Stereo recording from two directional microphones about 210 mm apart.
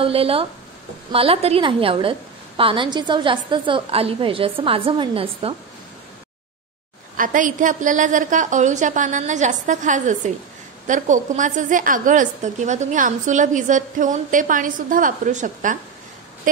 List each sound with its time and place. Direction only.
0.0 s a woman's voice: 25° right (ahead or behind)
7.2 s a woman's voice: 40° right (ahead or behind)